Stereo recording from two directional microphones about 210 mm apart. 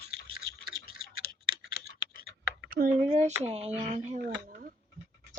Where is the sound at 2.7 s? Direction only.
40° right (ahead or behind).